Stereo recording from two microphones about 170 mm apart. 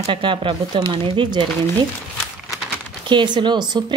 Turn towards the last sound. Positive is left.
turn(degrees=-25)  # may be behind; listen again after turning